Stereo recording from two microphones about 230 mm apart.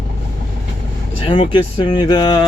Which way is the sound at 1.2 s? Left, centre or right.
Left.